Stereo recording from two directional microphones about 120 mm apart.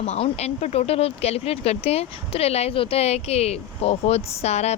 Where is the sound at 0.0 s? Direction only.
60° left (ahead or behind).